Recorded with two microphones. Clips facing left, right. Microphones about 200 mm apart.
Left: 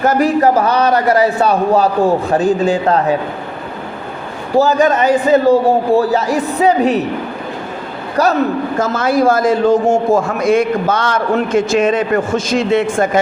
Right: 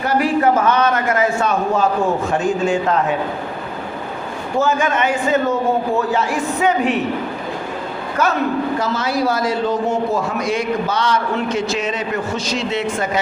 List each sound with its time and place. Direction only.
0.0 s a man's voice: 45° left (ahead or behind)
4.5 s a man's voice: 35° left (ahead or behind)
8.1 s a man's voice: 35° left (ahead or behind)
8.8 s a man's voice: 50° left (ahead or behind)